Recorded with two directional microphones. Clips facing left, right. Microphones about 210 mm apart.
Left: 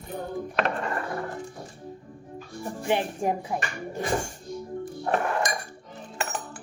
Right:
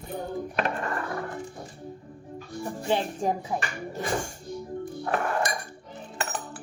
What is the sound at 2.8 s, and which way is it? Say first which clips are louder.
Speech: left 1 dB; 15° left (ahead or behind).